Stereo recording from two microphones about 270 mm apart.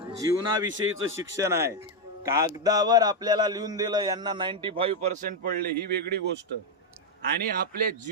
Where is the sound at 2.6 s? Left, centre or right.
Centre.